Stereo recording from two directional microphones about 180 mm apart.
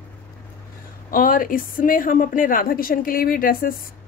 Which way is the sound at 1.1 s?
50° left (ahead or behind).